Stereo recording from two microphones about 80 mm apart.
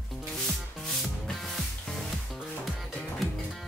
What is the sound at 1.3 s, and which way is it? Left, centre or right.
Music, centre.